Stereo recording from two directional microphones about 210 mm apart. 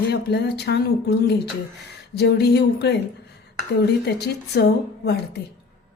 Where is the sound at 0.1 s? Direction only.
50° left (ahead or behind).